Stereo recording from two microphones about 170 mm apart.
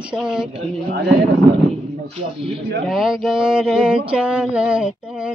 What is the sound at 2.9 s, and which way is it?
Female singing, centre (ahead or behind).